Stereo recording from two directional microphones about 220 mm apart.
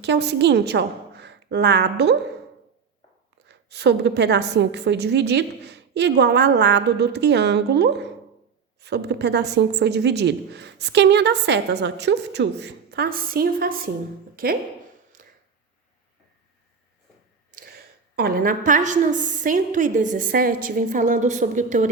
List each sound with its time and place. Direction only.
0.0 s a woman's voice: 50° right (ahead or behind)
3.5 s a woman's voice: 50° right (ahead or behind)
15.2 s a sound: 40° right (ahead or behind)
17.5 s a woman's voice: 40° right (ahead or behind)